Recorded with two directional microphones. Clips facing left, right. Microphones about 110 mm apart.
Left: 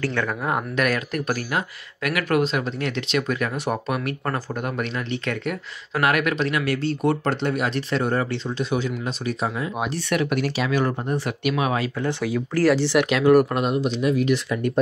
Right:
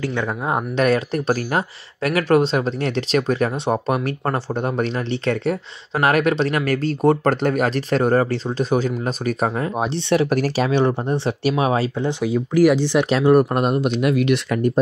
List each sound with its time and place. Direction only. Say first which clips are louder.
0.0 s speech: right 1 dB; 20° right (ahead or behind); by 9.7 s 45° right (ahead or behind)
9.8 s speech: right 6 dB; 30° right (ahead or behind)
10.3 s speech: right 4 dB; 40° right (ahead or behind)
10.7 s speech: right 4 dB; 25° right (ahead or behind)
12.1 s speech: right 4 dB; 15° right (ahead or behind)
13.6 s speech: right 3 dB; 50° right (ahead or behind); by 14.6 s 70° right (ahead or behind)